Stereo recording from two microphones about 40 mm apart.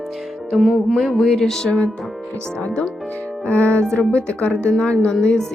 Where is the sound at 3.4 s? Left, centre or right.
Left.